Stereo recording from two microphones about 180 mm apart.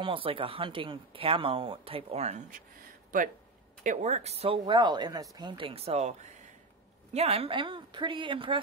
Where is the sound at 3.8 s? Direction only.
40° right (ahead or behind).